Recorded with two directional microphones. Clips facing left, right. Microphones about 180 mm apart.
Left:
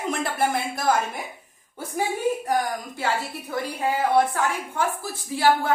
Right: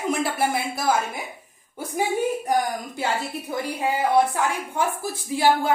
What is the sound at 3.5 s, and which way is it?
A woman's voice, 15° right (ahead or behind).